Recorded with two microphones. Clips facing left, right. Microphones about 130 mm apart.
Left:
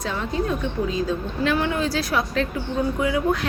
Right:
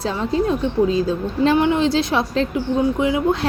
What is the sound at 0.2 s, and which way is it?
A woman's voice, 30° right (ahead or behind).